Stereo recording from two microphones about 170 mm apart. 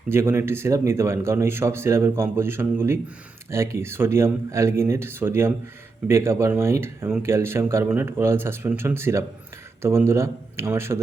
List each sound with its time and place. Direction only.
0.1 s speech: 15° right (ahead or behind)